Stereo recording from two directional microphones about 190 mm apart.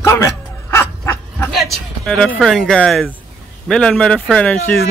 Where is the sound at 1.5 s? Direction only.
Centre (ahead or behind).